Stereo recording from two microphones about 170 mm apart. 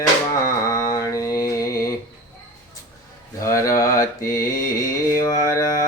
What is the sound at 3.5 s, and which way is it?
Mantra, 20° left (ahead or behind).